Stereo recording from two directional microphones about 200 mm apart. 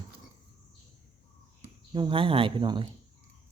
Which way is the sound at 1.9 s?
25° right (ahead or behind).